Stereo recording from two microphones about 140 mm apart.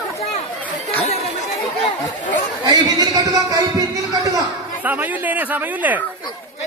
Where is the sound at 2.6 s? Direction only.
30° right (ahead or behind).